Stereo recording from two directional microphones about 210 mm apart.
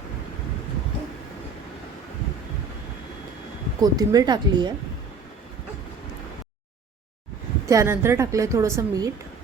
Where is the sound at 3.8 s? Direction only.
15° right (ahead or behind).